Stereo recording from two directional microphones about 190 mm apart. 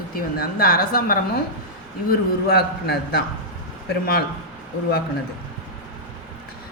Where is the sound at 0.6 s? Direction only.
50° left (ahead or behind).